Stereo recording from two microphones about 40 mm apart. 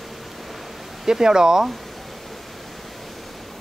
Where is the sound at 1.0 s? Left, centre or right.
Centre.